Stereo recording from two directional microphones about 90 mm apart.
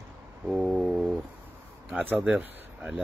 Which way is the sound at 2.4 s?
20° right (ahead or behind).